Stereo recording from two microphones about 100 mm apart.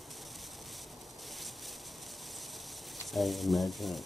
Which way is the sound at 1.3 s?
Centre (ahead or behind).